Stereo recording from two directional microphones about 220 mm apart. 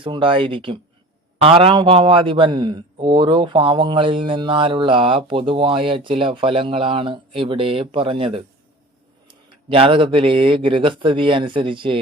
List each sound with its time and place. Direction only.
0.0 s a man's voice: 25° right (ahead or behind)